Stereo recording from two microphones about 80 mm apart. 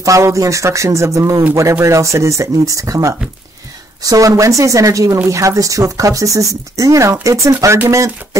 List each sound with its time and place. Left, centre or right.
0.0 s speech: right